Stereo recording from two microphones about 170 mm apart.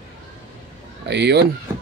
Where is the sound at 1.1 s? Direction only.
85° right.